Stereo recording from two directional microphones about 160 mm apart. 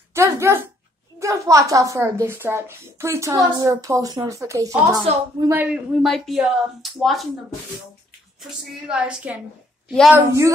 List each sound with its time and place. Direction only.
0.1 s a woman's voice: 15° right (ahead or behind); by 7.2 s centre (ahead or behind)
8.4 s a woman's voice: 5° right (ahead or behind)
10.1 s a woman's voice: 20° right (ahead or behind)